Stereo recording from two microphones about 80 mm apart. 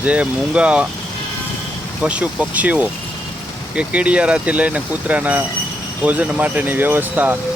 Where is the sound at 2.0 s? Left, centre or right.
Centre.